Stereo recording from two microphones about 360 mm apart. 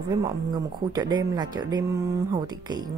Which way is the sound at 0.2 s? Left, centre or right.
Centre.